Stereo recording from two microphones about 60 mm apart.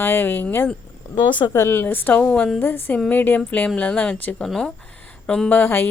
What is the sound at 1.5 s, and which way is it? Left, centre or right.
Speech, left.